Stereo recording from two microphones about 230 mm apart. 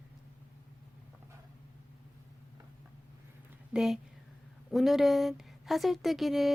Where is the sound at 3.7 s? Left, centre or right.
Centre.